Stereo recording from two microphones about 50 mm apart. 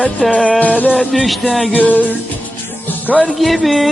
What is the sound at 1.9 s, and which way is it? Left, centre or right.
Music, left.